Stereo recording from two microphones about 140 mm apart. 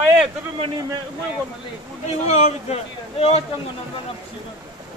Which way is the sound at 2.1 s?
50° left (ahead or behind).